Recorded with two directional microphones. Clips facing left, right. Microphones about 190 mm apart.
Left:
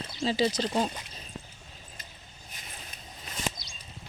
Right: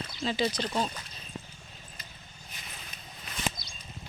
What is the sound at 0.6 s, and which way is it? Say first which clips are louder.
Speech: left 3 dB; 20° left (ahead or behind).